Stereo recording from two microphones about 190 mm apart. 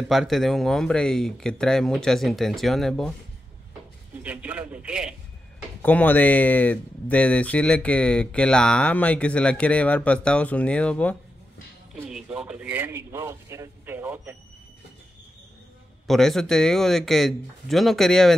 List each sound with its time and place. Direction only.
0.1 s speech: centre (ahead or behind)
4.2 s a man's voice: 10° right (ahead or behind)
5.8 s speech: 5° left (ahead or behind)
11.9 s a sound: 5° right (ahead or behind)
16.1 s speech: centre (ahead or behind)